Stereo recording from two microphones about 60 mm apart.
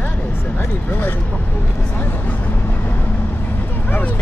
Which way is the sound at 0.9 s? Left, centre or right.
Left.